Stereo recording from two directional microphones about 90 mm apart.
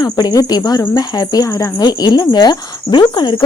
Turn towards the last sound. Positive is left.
turn(degrees=60)  # may be behind; listen again after turning